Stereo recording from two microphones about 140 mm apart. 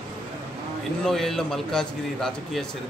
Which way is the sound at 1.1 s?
Centre (ahead or behind).